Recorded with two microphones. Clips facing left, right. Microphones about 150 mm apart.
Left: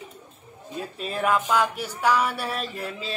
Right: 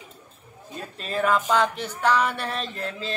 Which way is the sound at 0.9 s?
10° left (ahead or behind).